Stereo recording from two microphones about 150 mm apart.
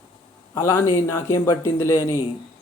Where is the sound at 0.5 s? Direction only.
20° left (ahead or behind).